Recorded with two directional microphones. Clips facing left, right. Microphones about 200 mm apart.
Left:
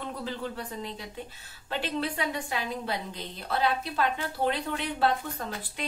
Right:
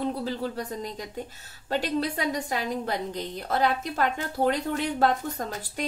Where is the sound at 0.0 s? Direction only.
40° right (ahead or behind).